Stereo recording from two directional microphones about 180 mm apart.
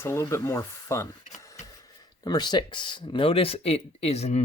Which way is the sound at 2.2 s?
25° left (ahead or behind).